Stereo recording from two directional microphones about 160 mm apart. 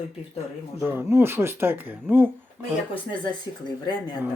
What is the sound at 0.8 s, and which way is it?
Speech, 10° right (ahead or behind).